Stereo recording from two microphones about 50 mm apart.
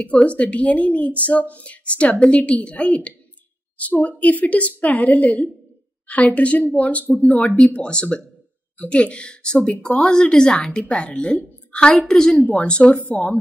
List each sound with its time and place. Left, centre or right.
0.0 s a woman's voice: left
9.9 s speech: centre